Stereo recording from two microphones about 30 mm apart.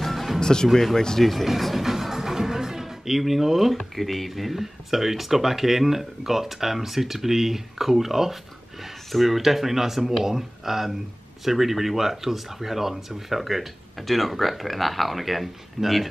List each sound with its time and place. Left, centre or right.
0.0 s music: centre
0.4 s speech: left
1.2 s speech: centre
1.9 s music: centre
3.7 s speech: centre